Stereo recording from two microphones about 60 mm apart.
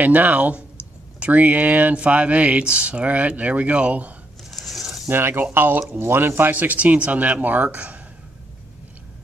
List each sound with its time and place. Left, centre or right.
0.0 s speech: right
4.5 s a sound: centre
5.1 s speech: right